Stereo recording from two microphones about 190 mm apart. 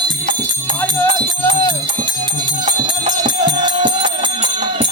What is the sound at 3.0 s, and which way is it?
Music, 25° right (ahead or behind).